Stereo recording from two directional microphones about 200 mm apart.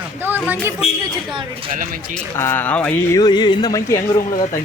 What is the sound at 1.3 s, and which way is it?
Speech, 25° right (ahead or behind).